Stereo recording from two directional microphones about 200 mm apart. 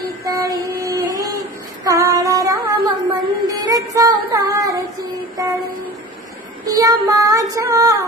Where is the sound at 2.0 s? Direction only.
15° right (ahead or behind).